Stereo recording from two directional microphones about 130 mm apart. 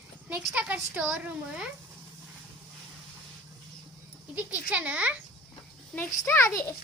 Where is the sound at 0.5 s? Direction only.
10° right (ahead or behind).